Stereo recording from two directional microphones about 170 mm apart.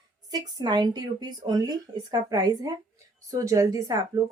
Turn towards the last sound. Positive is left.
turn(degrees=-20)  # may be behind; listen again after turning